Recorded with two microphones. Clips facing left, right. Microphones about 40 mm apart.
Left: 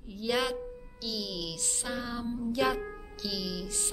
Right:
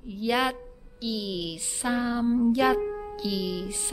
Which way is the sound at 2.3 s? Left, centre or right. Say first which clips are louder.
Right 13 dB; right.